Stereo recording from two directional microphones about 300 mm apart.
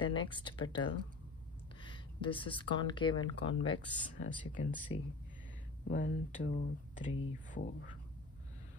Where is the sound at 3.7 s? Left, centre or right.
Left.